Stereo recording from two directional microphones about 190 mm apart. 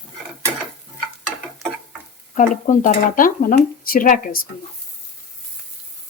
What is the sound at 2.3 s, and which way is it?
Speech, 40° left (ahead or behind).